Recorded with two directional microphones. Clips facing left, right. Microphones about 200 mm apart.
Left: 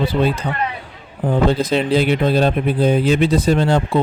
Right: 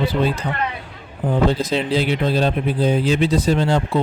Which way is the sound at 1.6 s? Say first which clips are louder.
Left 3 dB; 55° left (ahead or behind).